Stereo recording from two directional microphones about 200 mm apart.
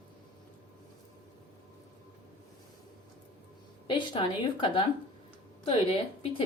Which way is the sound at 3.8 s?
25° left (ahead or behind).